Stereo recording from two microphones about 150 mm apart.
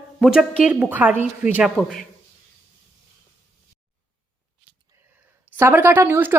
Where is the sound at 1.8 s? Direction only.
5° left (ahead or behind).